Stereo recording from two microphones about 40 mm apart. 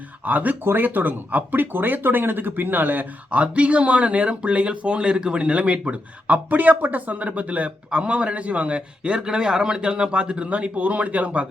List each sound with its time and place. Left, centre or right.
0.3 s speech: right
0.6 s speech: right
0.9 s speech: right
3.3 s a man's voice: right